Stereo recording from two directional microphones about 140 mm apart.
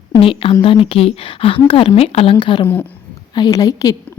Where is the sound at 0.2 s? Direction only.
40° left (ahead or behind).